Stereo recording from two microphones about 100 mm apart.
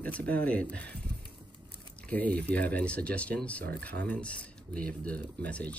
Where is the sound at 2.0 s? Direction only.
15° left (ahead or behind).